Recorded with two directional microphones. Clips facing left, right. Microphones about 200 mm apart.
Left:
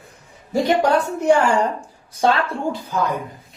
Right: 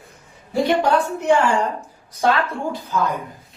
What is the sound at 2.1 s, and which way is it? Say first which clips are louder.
Speech: left 1 dB; 30° left (ahead or behind).